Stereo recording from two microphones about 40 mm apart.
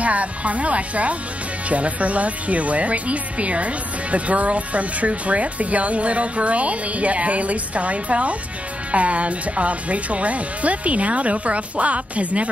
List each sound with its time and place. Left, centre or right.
0.0 s speech: right